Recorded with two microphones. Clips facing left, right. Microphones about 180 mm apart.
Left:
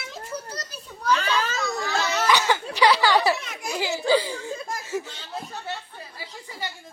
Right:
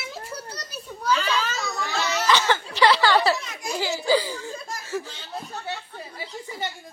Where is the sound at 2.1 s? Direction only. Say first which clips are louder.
Right 1 dB; 15° left (ahead or behind).